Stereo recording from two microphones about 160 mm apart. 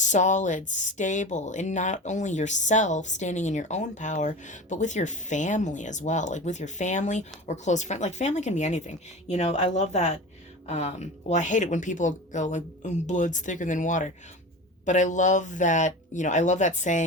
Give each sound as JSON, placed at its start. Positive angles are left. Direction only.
{"t": 0.0, "sound": "speech", "side_deg": 50}